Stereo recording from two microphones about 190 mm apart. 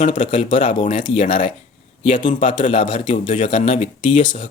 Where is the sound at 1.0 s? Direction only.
30° left (ahead or behind).